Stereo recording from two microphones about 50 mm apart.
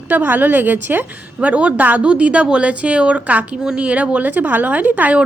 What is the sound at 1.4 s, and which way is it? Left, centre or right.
Speech, right.